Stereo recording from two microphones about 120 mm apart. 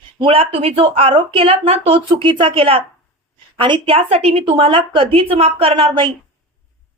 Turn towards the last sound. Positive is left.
turn(degrees=-50)  # may be behind; listen again after turning